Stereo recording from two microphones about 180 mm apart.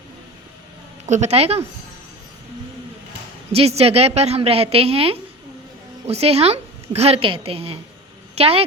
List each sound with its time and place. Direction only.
1.0 s a woman's voice: 40° right (ahead or behind)
3.5 s a woman's voice: 35° right (ahead or behind)